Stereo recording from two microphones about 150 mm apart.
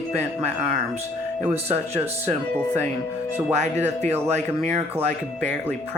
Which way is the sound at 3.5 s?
50° right (ahead or behind).